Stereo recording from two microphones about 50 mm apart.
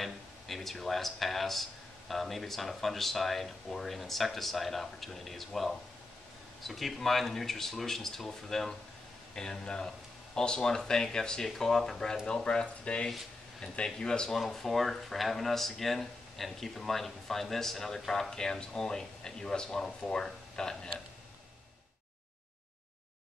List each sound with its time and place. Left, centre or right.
0.0 s speech: centre